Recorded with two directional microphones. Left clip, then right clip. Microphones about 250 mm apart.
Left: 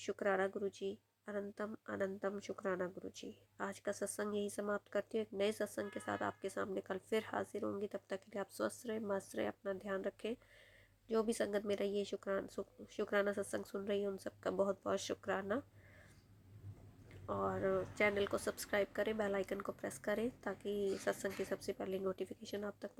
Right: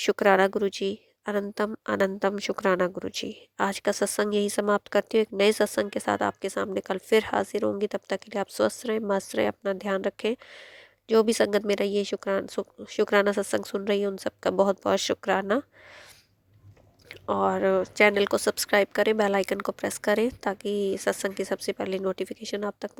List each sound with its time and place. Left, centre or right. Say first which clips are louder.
0.0 s a woman's voice: right 16 dB; right
17.1 s a woman's voice: right 15 dB; right